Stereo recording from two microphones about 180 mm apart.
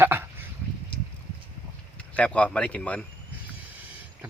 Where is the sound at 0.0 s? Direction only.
15° right (ahead or behind).